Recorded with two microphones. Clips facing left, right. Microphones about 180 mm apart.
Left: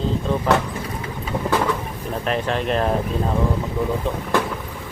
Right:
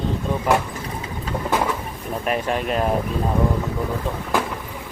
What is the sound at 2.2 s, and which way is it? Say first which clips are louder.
Speech: even; 10° right (ahead or behind).